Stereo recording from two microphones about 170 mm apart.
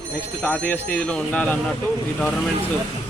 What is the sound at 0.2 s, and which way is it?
A man's voice, 5° left (ahead or behind).